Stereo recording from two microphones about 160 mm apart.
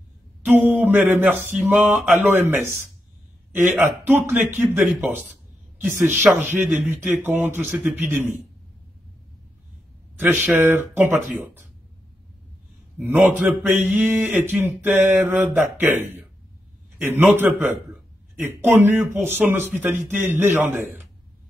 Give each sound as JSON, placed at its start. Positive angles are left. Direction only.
{"t": 0.5, "sound": "speech", "side_deg": -10}
{"t": 1.8, "sound": "speech", "side_deg": 0}
{"t": 10.2, "sound": "speech", "side_deg": -10}
{"t": 13.0, "sound": "speech", "side_deg": -10}